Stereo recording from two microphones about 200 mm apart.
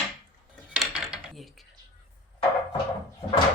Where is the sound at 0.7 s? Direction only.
5° right (ahead or behind).